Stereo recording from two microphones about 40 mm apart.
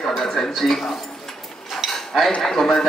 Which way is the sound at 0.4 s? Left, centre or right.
Centre.